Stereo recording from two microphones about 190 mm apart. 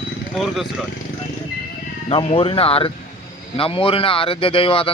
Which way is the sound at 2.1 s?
30° left (ahead or behind).